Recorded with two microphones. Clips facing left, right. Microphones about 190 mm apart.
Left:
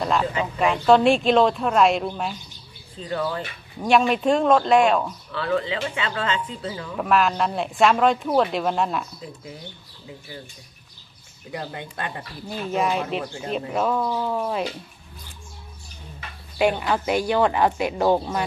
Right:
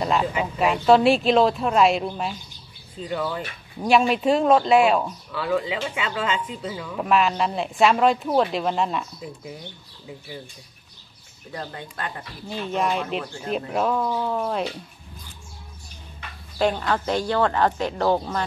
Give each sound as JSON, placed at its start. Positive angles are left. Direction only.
{"t": 0.0, "sound": "speech", "side_deg": -5}
{"t": 11.5, "sound": "speech", "side_deg": 15}
{"t": 12.4, "sound": "speech", "side_deg": 5}
{"t": 16.5, "sound": "speech", "side_deg": 10}